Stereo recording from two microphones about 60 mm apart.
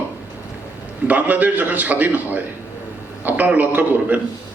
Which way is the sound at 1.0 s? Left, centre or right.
Right.